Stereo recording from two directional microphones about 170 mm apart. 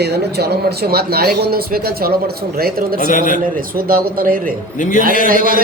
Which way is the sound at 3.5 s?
60° right (ahead or behind).